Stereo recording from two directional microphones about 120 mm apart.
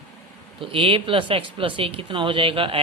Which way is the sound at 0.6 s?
45° right (ahead or behind).